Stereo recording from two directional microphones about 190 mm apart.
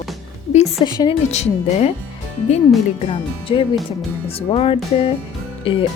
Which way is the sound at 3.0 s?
30° left (ahead or behind).